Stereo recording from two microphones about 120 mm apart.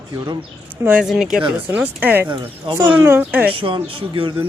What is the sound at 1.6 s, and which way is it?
Speech, 15° right (ahead or behind).